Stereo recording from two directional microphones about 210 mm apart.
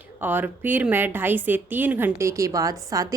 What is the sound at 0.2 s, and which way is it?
A woman's voice, 10° right (ahead or behind).